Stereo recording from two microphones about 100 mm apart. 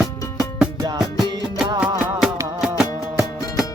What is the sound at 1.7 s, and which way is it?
Music, 10° right (ahead or behind).